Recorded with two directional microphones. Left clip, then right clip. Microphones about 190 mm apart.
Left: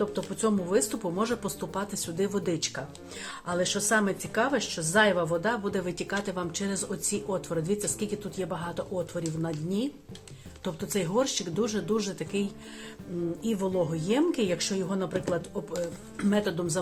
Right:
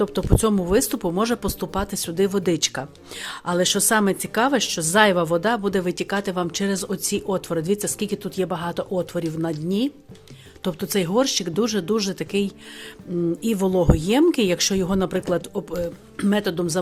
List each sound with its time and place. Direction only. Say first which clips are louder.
0.0 s speech: right 7 dB; 60° right (ahead or behind)